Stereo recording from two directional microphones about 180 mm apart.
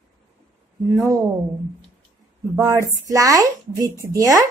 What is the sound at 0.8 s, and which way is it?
Speech, 15° right (ahead or behind).